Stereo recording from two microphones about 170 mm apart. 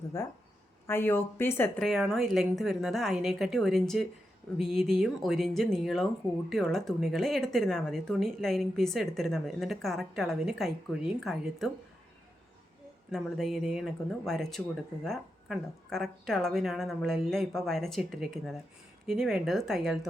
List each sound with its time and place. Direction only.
0.1 s speech: 15° left (ahead or behind)
1.8 s speech: centre (ahead or behind)
13.1 s speech: centre (ahead or behind)